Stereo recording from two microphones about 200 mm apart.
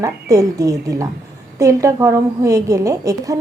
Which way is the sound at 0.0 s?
15° right (ahead or behind).